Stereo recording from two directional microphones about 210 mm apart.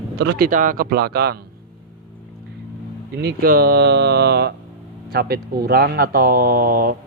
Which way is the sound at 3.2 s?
45° right (ahead or behind).